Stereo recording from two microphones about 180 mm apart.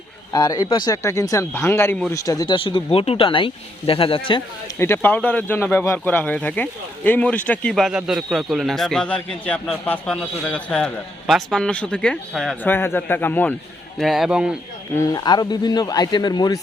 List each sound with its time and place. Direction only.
0.3 s speech: 20° left (ahead or behind)
4.8 s speech: 10° left (ahead or behind)
14.0 s a man's voice: centre (ahead or behind)
14.9 s speech: 20° left (ahead or behind)